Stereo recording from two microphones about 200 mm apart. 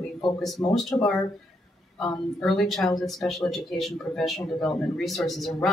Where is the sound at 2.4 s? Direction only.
Centre (ahead or behind).